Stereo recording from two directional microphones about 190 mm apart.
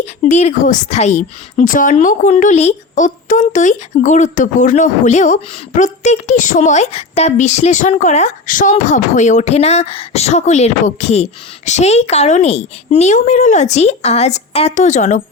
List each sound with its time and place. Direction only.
0.2 s a woman's voice: 35° left (ahead or behind)